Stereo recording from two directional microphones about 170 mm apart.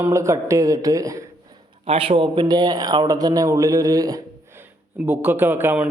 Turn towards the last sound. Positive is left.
turn(degrees=-10)  # may be behind; listen again after turning